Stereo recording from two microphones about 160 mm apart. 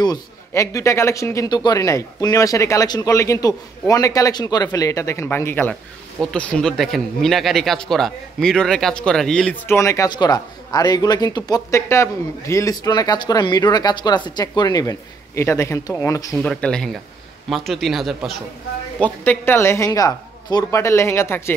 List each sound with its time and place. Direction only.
0.5 s speech: 20° left (ahead or behind)
16.4 s speech: 5° left (ahead or behind)
19.2 s a woman's voice: 15° left (ahead or behind)